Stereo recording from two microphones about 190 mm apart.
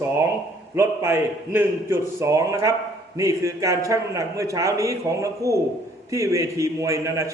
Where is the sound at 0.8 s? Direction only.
15° right (ahead or behind).